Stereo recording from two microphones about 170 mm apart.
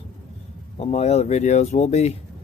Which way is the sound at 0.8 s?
40° left (ahead or behind).